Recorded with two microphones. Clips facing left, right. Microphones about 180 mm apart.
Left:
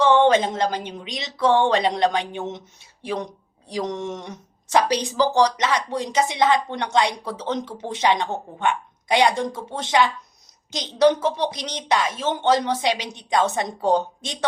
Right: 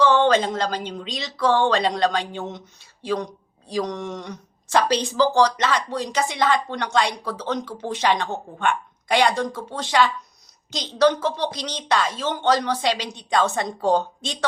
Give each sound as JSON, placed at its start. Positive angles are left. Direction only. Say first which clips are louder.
{"t": 0.0, "sound": "speech", "louder": "left 1 dB", "side_deg": 20}